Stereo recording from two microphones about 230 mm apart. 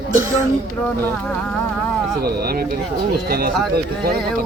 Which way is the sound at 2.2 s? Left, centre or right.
Right.